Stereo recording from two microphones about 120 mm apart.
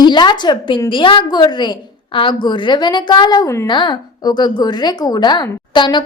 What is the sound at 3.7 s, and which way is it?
A woman's voice, 40° left (ahead or behind).